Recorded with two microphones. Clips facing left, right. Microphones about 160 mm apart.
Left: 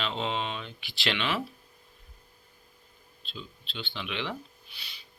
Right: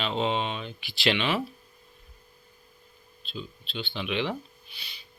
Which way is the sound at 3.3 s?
10° right (ahead or behind).